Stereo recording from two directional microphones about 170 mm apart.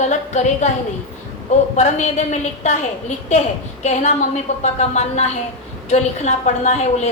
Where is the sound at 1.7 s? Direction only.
45° left (ahead or behind).